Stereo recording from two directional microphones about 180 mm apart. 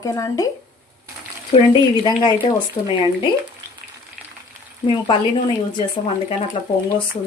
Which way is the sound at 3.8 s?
55° right (ahead or behind).